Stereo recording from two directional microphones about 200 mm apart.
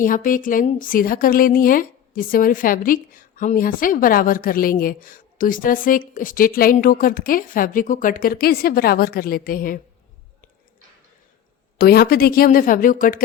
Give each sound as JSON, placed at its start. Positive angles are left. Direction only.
{"t": 0.0, "sound": "speech", "side_deg": 40}
{"t": 11.8, "sound": "speech", "side_deg": 50}